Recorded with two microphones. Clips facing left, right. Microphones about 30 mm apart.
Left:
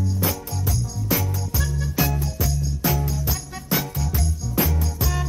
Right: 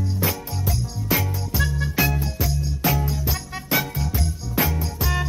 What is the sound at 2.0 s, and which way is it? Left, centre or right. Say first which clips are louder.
Music: right 1 dB; right.